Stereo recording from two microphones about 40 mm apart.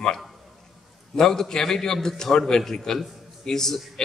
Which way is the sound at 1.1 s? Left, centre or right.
Centre.